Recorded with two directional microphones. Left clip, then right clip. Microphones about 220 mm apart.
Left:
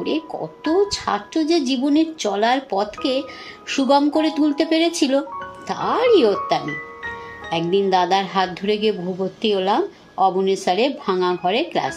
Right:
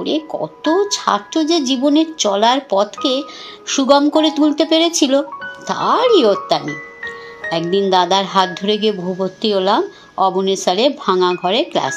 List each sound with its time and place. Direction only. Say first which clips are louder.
0.0 s a woman's voice: right 4 dB; 20° right (ahead or behind)
7.9 s a woman's voice: right 6 dB; 25° right (ahead or behind)